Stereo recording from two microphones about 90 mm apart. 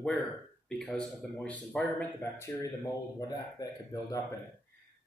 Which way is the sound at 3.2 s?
40° left (ahead or behind).